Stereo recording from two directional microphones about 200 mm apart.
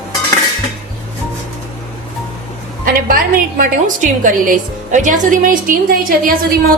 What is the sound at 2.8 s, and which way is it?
A woman's voice, 45° right (ahead or behind).